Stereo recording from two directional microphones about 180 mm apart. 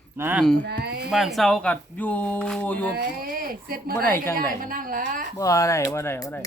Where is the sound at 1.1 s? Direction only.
Centre (ahead or behind).